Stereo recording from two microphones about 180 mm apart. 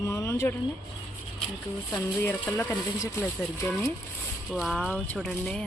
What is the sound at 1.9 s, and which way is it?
Speech, 10° left (ahead or behind).